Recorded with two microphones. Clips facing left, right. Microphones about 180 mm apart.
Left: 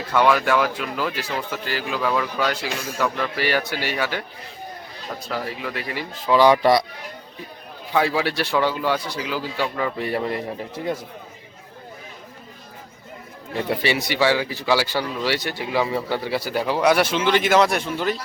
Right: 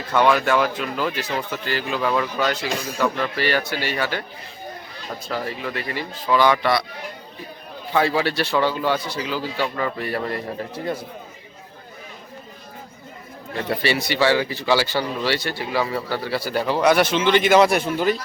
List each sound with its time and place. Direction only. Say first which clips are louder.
0.1 s speech: right 1 dB; 5° left (ahead or behind)
5.3 s speech: right 1 dB; 10° left (ahead or behind)
6.2 s speech: left 3 dB; 30° left (ahead or behind)
7.9 s speech: right 1 dB; 10° left (ahead or behind)
13.7 s speech: right 1 dB; 15° left (ahead or behind); by 18.2 s 5° right (ahead or behind)